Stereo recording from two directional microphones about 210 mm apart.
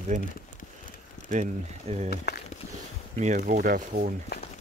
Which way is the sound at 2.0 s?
50° left (ahead or behind).